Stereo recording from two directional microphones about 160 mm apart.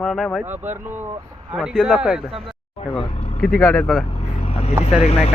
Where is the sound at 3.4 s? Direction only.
10° left (ahead or behind).